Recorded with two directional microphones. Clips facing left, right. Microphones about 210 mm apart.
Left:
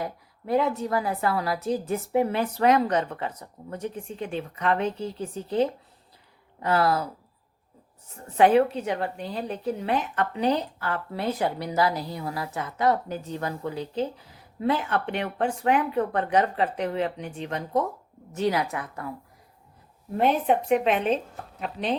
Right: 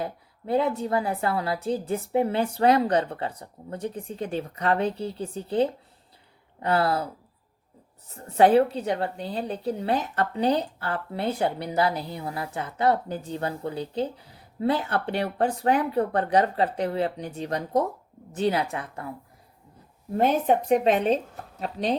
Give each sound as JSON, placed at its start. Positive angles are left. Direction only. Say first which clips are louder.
{"t": 0.0, "sound": "a woman's voice", "louder": "right 1 dB", "side_deg": -30}
{"t": 8.1, "sound": "a woman's voice", "louder": "right 1 dB", "side_deg": -35}
{"t": 20.1, "sound": "a woman's voice", "louder": "right 1 dB", "side_deg": -40}